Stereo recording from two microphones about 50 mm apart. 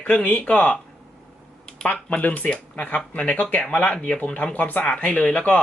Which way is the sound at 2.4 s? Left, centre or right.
Centre.